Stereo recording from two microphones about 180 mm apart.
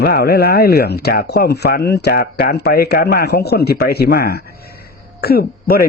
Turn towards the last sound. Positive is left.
turn(degrees=60)  # may be behind; listen again after turning